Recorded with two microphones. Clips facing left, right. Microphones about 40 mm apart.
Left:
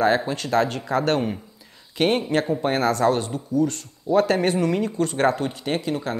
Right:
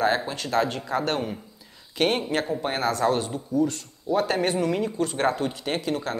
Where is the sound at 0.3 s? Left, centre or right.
Left.